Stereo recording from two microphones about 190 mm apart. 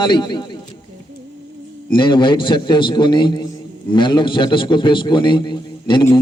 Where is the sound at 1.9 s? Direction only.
25° left (ahead or behind).